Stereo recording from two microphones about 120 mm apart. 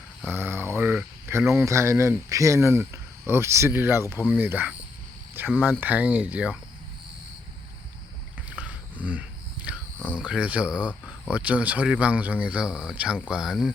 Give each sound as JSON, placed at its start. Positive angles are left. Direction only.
{"t": 0.3, "sound": "speech", "side_deg": -20}
{"t": 8.4, "sound": "a sound", "side_deg": -10}
{"t": 10.2, "sound": "speech", "side_deg": -10}